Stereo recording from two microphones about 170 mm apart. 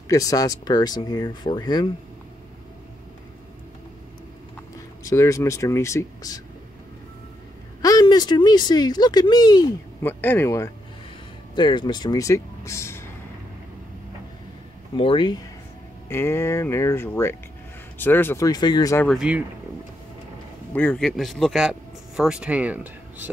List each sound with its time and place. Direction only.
0.1 s speech: 20° left (ahead or behind)
5.0 s speech: 20° left (ahead or behind)
7.8 s speech: 20° left (ahead or behind)
10.0 s speech: 10° left (ahead or behind)
11.5 s speech: 25° left (ahead or behind)
15.0 s speech: 30° left (ahead or behind)
16.1 s speech: 15° left (ahead or behind)
19.0 s speech: 5° right (ahead or behind)
20.7 s speech: 10° left (ahead or behind); by 23.3 s 10° right (ahead or behind)